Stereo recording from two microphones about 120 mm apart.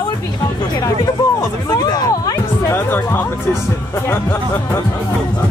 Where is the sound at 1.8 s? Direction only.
30° left (ahead or behind).